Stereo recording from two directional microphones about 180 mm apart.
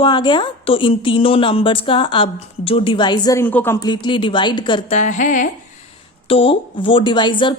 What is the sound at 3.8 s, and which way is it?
A woman's voice, 25° left (ahead or behind).